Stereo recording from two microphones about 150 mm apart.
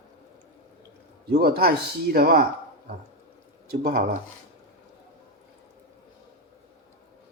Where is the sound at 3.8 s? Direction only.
90° right.